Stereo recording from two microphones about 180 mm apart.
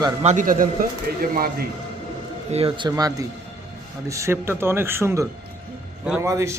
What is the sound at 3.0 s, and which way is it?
A man's voice, 20° right (ahead or behind).